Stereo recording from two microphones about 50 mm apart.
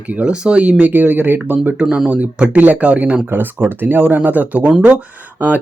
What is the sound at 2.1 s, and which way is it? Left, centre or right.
Speech, right.